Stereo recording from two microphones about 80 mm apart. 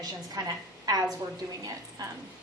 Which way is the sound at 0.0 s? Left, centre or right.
Right.